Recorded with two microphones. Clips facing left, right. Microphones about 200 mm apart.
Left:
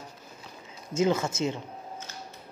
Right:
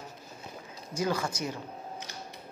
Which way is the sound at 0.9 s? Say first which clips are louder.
Left 5 dB; 25° left (ahead or behind).